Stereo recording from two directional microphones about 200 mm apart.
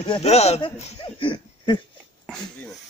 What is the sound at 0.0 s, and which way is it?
Speech, 30° left (ahead or behind).